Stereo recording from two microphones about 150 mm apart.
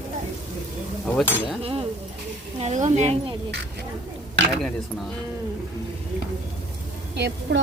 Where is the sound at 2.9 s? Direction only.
50° right (ahead or behind).